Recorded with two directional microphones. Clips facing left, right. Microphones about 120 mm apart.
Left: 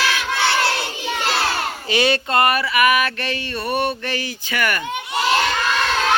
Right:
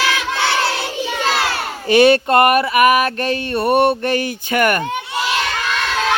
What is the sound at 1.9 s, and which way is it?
Mantra, 50° right (ahead or behind).